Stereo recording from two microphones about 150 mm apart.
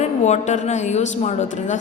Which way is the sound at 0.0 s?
50° left (ahead or behind).